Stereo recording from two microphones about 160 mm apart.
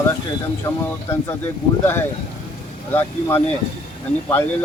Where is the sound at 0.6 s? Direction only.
15° left (ahead or behind).